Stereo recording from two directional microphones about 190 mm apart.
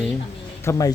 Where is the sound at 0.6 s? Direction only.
15° left (ahead or behind).